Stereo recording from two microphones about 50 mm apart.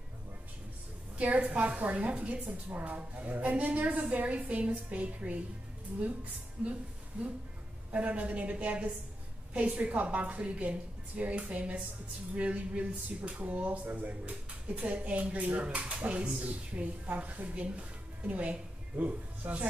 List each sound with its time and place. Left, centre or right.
1.1 s a woman's voice: right